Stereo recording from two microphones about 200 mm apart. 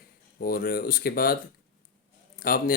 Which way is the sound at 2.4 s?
45° left (ahead or behind).